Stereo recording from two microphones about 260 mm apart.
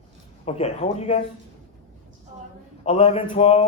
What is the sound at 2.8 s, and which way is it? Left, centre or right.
Speech, left.